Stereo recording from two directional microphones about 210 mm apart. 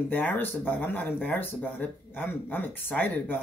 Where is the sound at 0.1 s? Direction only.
10° left (ahead or behind).